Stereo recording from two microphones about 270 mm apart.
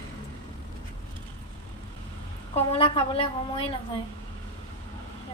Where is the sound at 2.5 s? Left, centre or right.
Left.